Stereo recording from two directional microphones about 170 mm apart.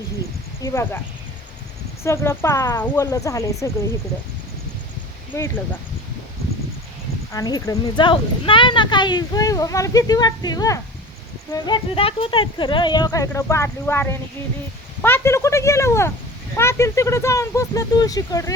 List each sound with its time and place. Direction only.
0.6 s speech: 15° left (ahead or behind)
2.0 s speech: 15° left (ahead or behind)
5.3 s speech: 10° left (ahead or behind)
7.3 s speech: 20° left (ahead or behind)